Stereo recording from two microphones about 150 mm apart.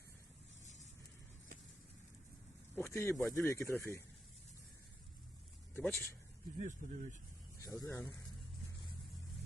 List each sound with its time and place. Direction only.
0.6 s a sound: 50° left (ahead or behind)
2.7 s speech: 15° left (ahead or behind)
5.7 s speech: 10° left (ahead or behind)
6.6 s speech: 55° right (ahead or behind)
7.6 s speech: 20° left (ahead or behind)